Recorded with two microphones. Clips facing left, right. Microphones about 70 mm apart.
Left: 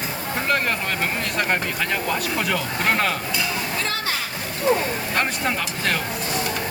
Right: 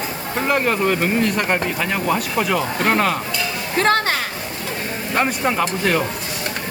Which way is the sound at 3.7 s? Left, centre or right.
Right.